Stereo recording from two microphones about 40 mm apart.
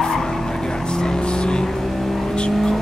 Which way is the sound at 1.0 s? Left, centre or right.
Left.